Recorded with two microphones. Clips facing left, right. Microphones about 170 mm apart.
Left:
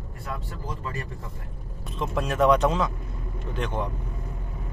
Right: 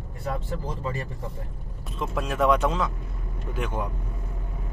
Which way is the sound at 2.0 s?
Centre (ahead or behind).